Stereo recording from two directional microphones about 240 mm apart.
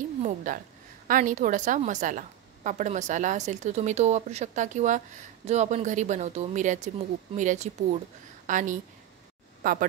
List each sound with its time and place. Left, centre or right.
0.2 s a woman's voice: right